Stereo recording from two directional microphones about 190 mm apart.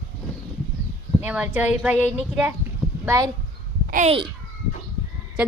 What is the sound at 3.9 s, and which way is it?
Speech, 40° right (ahead or behind).